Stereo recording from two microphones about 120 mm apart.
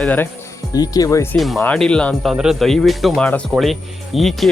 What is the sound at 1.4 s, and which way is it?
Speech, centre (ahead or behind).